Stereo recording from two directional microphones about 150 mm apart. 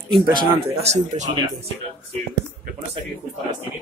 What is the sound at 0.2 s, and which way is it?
Speech, 30° right (ahead or behind).